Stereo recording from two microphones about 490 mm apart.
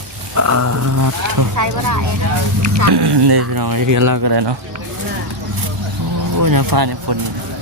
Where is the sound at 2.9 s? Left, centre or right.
Right.